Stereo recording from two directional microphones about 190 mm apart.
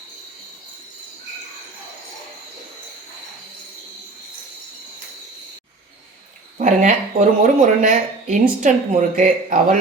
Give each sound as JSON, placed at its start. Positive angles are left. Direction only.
{"t": 6.6, "sound": "speech", "side_deg": -40}